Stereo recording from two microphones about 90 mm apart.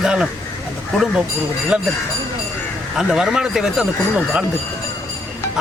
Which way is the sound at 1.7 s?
10° right (ahead or behind).